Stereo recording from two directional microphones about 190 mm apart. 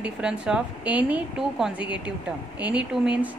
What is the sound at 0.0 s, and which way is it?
A woman's voice, 5° right (ahead or behind).